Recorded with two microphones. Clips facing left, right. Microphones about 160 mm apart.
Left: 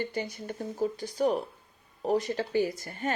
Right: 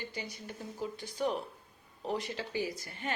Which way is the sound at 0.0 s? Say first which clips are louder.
Left 9 dB; 55° left (ahead or behind).